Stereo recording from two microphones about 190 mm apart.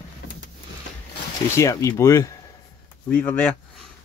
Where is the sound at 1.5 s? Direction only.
15° left (ahead or behind).